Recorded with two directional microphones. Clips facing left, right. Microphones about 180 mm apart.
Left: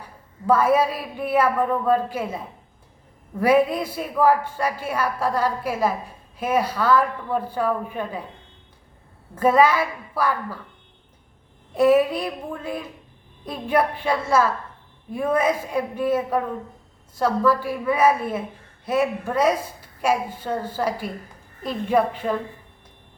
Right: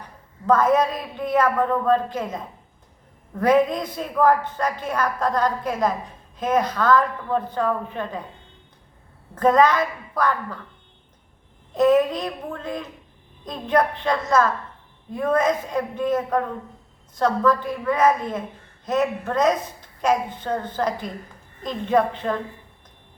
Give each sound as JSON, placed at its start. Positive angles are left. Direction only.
{"t": 0.0, "sound": "a woman's voice", "side_deg": 10}
{"t": 9.3, "sound": "a woman's voice", "side_deg": 10}
{"t": 11.7, "sound": "a woman's voice", "side_deg": 10}